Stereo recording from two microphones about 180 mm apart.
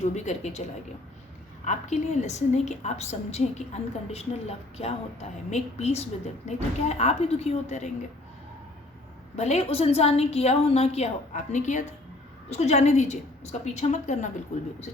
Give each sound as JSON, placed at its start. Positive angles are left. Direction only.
{"t": 0.0, "sound": "a woman's voice", "side_deg": 40}
{"t": 1.6, "sound": "a woman's voice", "side_deg": 40}
{"t": 9.3, "sound": "a woman's voice", "side_deg": 40}